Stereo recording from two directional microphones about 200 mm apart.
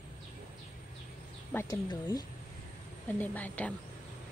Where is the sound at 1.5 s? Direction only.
10° left (ahead or behind).